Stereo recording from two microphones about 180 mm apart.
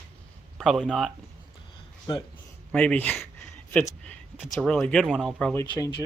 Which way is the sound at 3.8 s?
10° left (ahead or behind).